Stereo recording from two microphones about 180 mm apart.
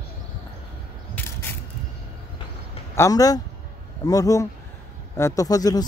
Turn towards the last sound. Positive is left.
turn(degrees=20)  # may be behind; listen again after turning